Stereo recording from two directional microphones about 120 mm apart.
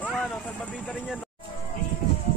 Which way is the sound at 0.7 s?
5° right (ahead or behind).